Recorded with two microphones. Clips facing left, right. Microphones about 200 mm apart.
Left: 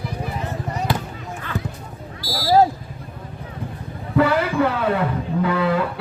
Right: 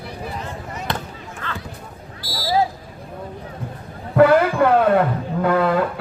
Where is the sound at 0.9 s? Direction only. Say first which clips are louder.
Left 2 dB; 5° left (ahead or behind).